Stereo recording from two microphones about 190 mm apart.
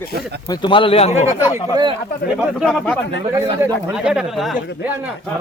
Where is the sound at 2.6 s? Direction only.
Centre (ahead or behind).